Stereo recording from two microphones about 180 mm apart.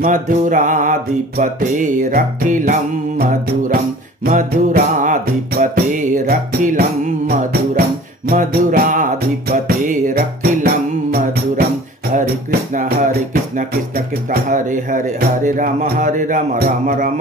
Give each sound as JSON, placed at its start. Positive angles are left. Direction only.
{"t": 0.0, "sound": "music", "side_deg": -45}
{"t": 12.7, "sound": "music", "side_deg": -50}